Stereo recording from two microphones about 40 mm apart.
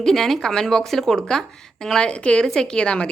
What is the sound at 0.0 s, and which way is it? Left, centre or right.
A woman's voice, centre.